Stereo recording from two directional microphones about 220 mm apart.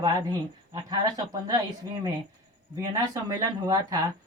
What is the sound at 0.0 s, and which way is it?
Speech, 15° right (ahead or behind).